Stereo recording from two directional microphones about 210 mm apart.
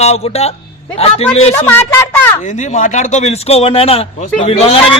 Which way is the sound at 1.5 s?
10° left (ahead or behind).